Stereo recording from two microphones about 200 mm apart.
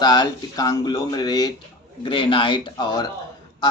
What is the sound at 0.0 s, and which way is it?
Speech, 20° left (ahead or behind).